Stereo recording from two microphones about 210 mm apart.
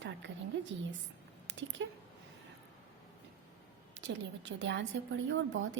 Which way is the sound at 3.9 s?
60° right (ahead or behind).